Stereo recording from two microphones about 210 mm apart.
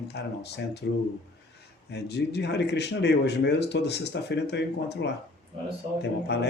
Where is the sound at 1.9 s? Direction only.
50° left (ahead or behind).